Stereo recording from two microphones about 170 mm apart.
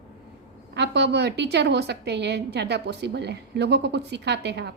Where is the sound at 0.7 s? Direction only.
80° right.